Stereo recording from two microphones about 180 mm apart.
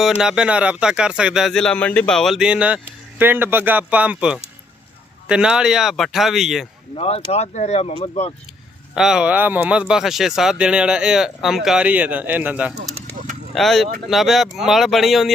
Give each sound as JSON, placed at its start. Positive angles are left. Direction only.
{"t": 0.2, "sound": "speech", "side_deg": -5}
{"t": 6.9, "sound": "speech", "side_deg": 35}
{"t": 9.0, "sound": "speech", "side_deg": -5}
{"t": 12.7, "sound": "a sound", "side_deg": -40}
{"t": 13.5, "sound": "speech", "side_deg": 0}